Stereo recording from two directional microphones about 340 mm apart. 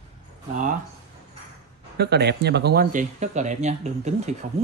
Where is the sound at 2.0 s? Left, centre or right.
Right.